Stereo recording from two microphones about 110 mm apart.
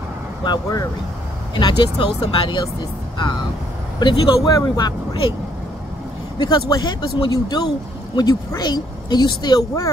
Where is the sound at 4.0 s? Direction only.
40° left (ahead or behind).